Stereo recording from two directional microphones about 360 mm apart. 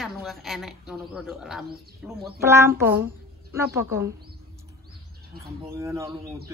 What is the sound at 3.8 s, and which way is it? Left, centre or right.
Speech, centre.